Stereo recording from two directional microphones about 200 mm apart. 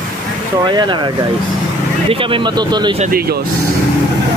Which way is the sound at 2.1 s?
25° right (ahead or behind).